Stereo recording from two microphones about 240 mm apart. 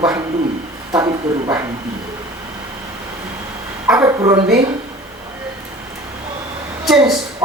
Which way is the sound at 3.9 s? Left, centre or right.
Centre.